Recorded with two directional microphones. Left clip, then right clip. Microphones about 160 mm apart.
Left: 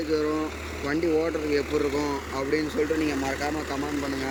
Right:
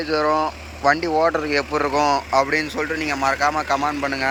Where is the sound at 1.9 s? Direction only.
75° right (ahead or behind).